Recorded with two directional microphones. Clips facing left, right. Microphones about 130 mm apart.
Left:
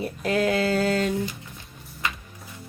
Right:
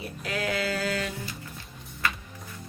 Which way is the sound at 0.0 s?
45° left (ahead or behind).